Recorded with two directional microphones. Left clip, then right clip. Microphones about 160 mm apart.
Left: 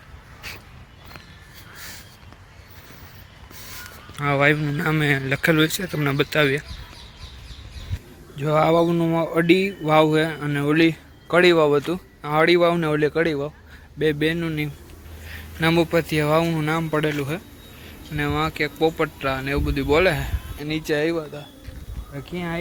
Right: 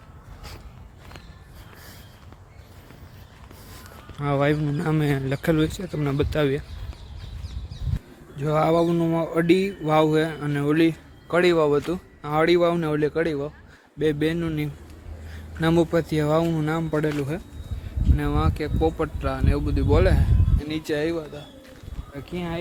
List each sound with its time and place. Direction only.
0.4 s a sound: 15° right (ahead or behind)
4.2 s speech: 15° right (ahead or behind)
8.4 s speech: centre (ahead or behind)
14.0 s speech: 10° right (ahead or behind); by 21.4 s 20° left (ahead or behind)
22.1 s speech: centre (ahead or behind)